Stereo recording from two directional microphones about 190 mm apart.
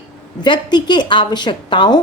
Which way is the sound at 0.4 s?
25° left (ahead or behind).